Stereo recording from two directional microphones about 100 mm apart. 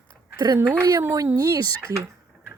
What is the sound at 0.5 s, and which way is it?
Speech, 20° right (ahead or behind).